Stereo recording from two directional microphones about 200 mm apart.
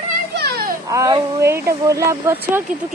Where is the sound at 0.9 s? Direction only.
15° right (ahead or behind).